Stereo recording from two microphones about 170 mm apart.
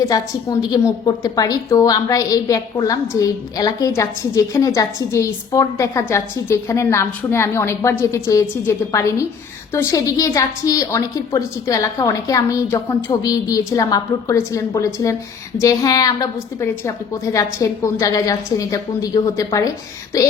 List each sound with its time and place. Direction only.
0.1 s a woman's voice: 20° left (ahead or behind)